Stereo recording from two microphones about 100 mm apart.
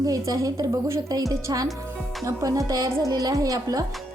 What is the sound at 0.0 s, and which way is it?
A woman's voice, 35° right (ahead or behind).